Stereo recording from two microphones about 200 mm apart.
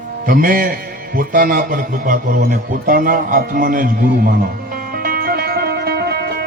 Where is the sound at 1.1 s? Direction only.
45° right (ahead or behind).